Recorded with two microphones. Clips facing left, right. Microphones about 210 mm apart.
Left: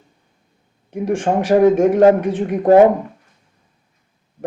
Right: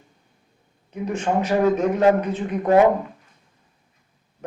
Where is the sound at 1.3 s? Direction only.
45° left (ahead or behind).